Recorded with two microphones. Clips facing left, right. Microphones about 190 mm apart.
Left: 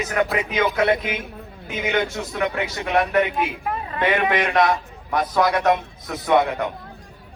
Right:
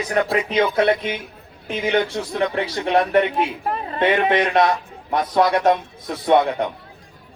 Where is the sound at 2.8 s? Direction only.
30° right (ahead or behind).